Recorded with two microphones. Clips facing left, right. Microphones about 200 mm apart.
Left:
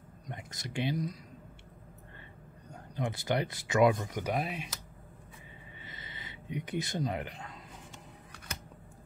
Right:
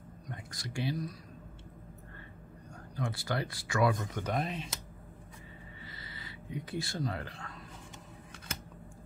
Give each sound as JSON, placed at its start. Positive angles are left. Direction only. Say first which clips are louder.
{"t": 0.3, "sound": "speech", "louder": "left 2 dB", "side_deg": 20}
{"t": 2.7, "sound": "speech", "louder": "left 2 dB", "side_deg": 20}
{"t": 5.9, "sound": "a sound", "louder": "left 2 dB", "side_deg": 20}